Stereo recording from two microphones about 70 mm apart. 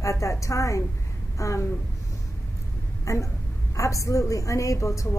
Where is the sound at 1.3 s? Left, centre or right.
Left.